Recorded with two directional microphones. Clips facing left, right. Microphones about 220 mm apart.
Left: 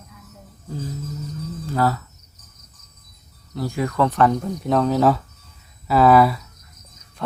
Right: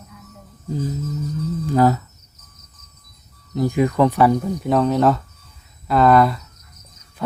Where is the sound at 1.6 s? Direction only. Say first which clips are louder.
Right 5 dB; 15° right (ahead or behind).